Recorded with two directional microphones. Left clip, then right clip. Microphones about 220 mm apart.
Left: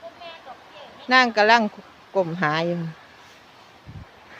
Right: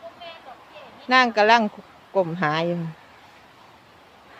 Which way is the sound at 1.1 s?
Centre (ahead or behind).